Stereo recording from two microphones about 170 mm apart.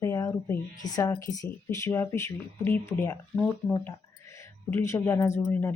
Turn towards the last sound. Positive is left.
turn(degrees=15)  # may be behind; listen again after turning